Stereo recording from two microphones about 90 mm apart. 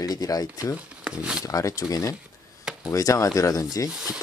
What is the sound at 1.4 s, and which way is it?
Speech, 40° left (ahead or behind).